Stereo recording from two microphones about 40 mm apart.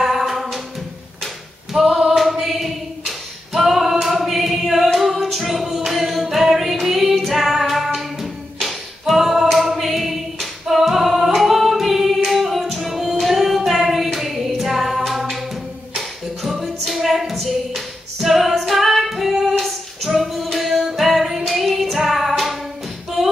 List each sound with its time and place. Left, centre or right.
0.0 s music: centre
1.2 s singing: centre
4.9 s music: centre
5.9 s singing: centre
6.2 s music: centre
7.9 s singing: centre
15.9 s music: centre
19.4 s female singing: centre
20.5 s music: centre